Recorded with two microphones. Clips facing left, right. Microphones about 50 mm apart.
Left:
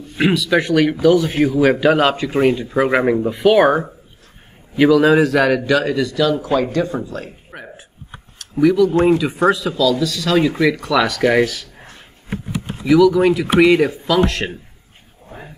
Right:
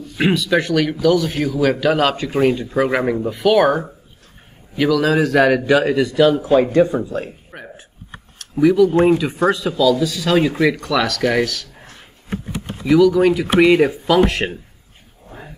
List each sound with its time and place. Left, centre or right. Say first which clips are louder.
0.2 s speech: left 1 dB; centre
0.6 s a man's voice: left 2 dB; centre
5.3 s speech: right 1 dB; centre
5.7 s a man's voice: right 2 dB; centre
7.5 s a sound: left 1 dB; centre
8.4 s a man's voice: even; centre
10.8 s speech: left 2 dB; centre
11.1 s a man's voice: left 3 dB; centre
12.8 s speech: left 1 dB; centre
14.0 s a man's voice: right 2 dB; centre